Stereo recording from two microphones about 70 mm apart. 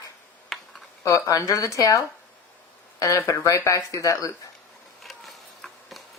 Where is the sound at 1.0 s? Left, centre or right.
Left.